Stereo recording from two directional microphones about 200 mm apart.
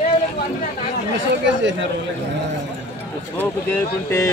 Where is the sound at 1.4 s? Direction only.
65° right (ahead or behind).